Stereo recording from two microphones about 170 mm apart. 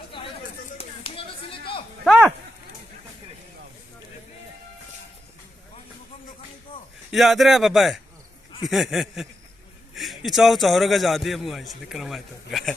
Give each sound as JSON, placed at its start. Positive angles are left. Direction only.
{"t": 0.8, "sound": "a sound", "side_deg": 30}
{"t": 2.0, "sound": "livestock", "side_deg": -5}
{"t": 7.1, "sound": "a man's voice", "side_deg": 0}